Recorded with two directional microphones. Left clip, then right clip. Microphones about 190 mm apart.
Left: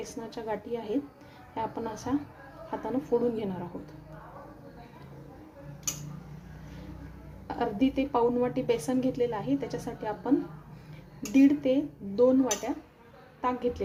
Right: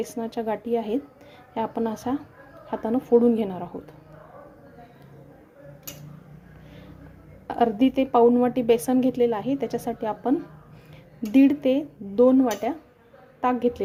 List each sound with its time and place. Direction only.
0.0 s a woman's voice: 50° right (ahead or behind)
7.4 s a woman's voice: 45° right (ahead or behind)
11.3 s a woman's voice: 45° right (ahead or behind)